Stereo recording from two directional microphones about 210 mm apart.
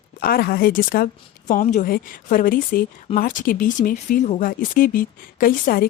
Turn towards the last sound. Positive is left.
turn(degrees=45)  # may be behind; listen again after turning